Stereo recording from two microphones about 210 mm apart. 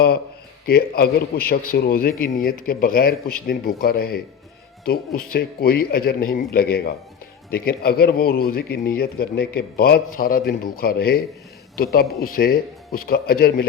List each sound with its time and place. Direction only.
0.6 s a man's voice: 45° left (ahead or behind)